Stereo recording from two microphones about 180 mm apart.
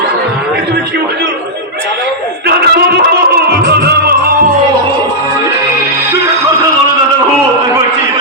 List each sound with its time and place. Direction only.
2.5 s music: 60° right (ahead or behind)